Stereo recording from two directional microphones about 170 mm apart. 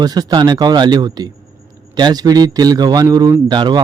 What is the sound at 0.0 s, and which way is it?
A man's voice, 25° right (ahead or behind).